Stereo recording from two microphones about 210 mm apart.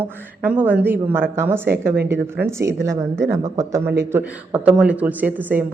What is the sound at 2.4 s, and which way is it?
Speech, 10° right (ahead or behind).